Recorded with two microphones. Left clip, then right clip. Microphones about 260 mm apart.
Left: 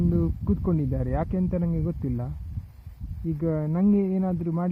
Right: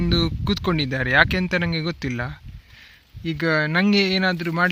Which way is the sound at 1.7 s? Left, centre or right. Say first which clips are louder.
Right 5 dB; right.